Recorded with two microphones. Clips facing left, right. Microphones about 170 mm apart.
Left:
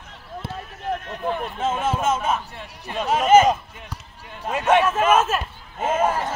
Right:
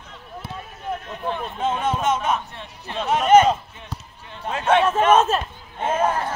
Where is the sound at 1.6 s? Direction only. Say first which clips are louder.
Right 1 dB; 5° left (ahead or behind).